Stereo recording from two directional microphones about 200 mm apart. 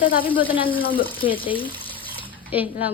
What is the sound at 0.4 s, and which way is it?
Speech, 25° left (ahead or behind).